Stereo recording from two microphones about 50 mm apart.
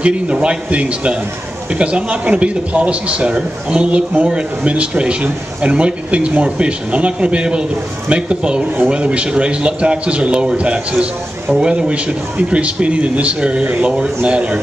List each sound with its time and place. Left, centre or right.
0.0 s a man's voice: right